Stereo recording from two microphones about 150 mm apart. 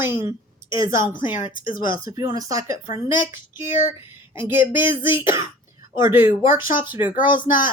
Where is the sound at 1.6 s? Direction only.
65° left (ahead or behind).